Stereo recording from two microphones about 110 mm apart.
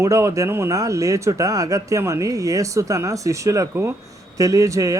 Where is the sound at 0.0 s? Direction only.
30° right (ahead or behind).